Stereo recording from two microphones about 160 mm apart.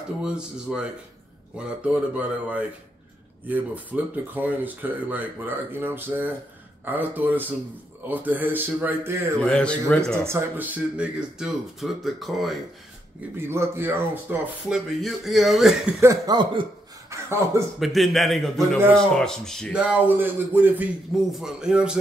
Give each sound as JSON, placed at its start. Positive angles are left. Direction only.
{"t": 0.2, "sound": "speech", "side_deg": -5}
{"t": 9.4, "sound": "speech", "side_deg": 5}
{"t": 10.2, "sound": "speech", "side_deg": -15}
{"t": 13.4, "sound": "speech", "side_deg": -15}
{"t": 14.7, "sound": "speech", "side_deg": 0}
{"t": 16.0, "sound": "speech", "side_deg": -20}
{"t": 17.1, "sound": "a sound", "side_deg": -15}
{"t": 17.7, "sound": "speech", "side_deg": 0}